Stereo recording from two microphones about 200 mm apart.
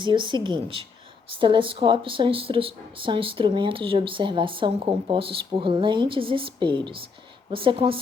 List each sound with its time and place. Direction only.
0.0 s speech: 25° right (ahead or behind)